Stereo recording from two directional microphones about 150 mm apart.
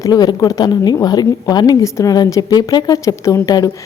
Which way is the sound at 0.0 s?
25° left (ahead or behind).